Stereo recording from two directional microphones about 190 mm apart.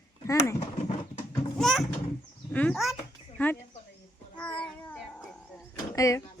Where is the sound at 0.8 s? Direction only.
35° left (ahead or behind).